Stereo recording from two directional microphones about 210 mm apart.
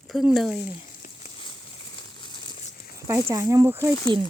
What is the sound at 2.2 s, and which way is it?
Tearing, 25° left (ahead or behind).